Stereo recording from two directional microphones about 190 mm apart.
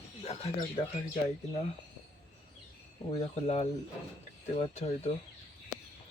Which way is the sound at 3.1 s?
35° left (ahead or behind).